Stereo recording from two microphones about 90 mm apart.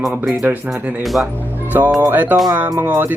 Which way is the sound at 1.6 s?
20° right (ahead or behind).